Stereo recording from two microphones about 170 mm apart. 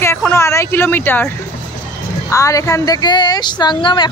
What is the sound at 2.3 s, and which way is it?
Speech, 20° left (ahead or behind).